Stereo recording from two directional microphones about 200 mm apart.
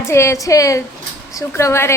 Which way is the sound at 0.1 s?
15° left (ahead or behind).